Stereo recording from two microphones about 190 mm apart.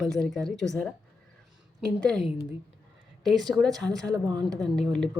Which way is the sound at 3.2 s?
Centre (ahead or behind).